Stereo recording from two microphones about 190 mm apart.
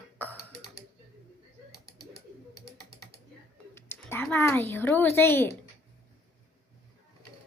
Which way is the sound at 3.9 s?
10° left (ahead or behind).